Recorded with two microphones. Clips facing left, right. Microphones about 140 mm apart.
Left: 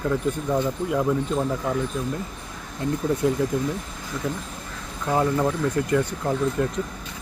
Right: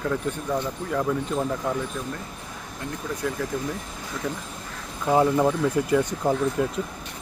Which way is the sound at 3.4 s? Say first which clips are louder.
Left 5 dB; 20° left (ahead or behind).